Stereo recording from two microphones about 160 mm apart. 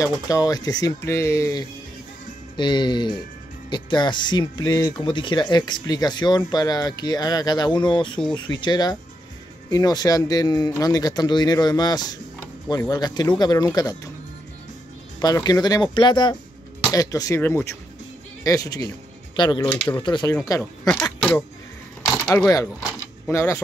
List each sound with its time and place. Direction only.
0.0 s speech: 20° left (ahead or behind)
15.1 s speech: 25° left (ahead or behind)
19.7 s speech: 10° left (ahead or behind)
20.0 s speech: 30° left (ahead or behind)
20.9 s speech: 5° left (ahead or behind)
22.5 s speech: 20° left (ahead or behind)